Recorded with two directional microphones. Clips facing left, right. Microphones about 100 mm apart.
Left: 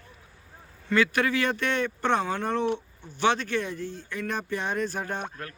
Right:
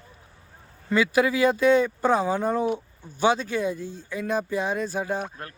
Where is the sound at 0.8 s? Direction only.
10° right (ahead or behind).